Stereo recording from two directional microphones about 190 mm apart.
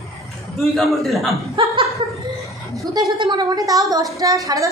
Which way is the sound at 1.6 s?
30° right (ahead or behind).